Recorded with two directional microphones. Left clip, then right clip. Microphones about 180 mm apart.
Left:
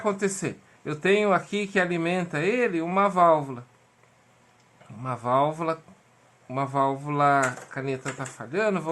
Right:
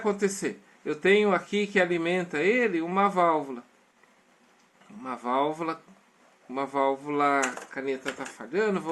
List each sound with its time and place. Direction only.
0.0 s speech: 25° left (ahead or behind)
5.0 s speech: 25° left (ahead or behind)